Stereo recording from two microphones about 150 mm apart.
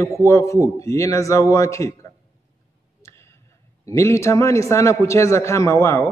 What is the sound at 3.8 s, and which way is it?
Speech, 20° left (ahead or behind).